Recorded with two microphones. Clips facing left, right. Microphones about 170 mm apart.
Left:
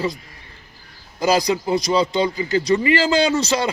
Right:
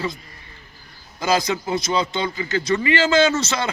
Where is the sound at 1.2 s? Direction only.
40° left (ahead or behind).